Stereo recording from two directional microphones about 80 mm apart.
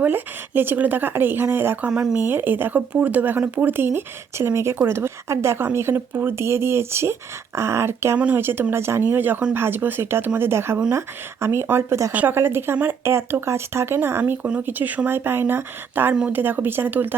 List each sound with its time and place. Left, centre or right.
0.0 s speech: right